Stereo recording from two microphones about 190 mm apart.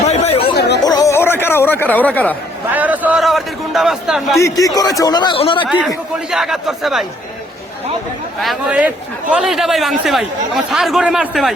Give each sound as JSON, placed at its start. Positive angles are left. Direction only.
{"t": 0.1, "sound": "chatter", "side_deg": 35}
{"t": 0.8, "sound": "chatter", "side_deg": 20}
{"t": 2.7, "sound": "a sound", "side_deg": -10}
{"t": 4.4, "sound": "a man's voice", "side_deg": 15}
{"t": 5.6, "sound": "a man's voice", "side_deg": -5}
{"t": 8.4, "sound": "speech", "side_deg": -5}